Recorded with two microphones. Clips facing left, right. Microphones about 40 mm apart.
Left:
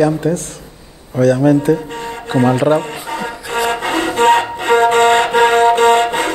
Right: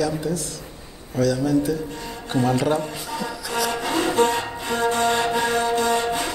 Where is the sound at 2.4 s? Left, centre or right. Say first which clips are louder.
Left 8 dB; left.